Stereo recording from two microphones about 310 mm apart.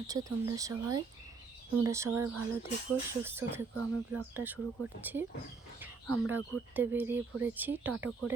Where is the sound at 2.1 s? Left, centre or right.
Right.